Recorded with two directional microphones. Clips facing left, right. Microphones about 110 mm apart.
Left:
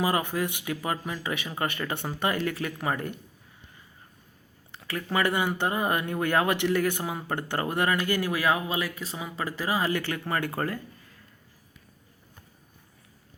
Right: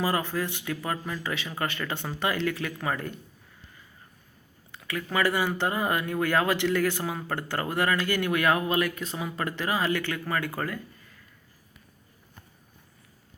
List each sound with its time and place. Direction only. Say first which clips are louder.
0.0 s speech: left 1 dB; 15° left (ahead or behind)
4.8 s a sound: even; 30° left (ahead or behind)
5.1 s speech: even; 20° left (ahead or behind)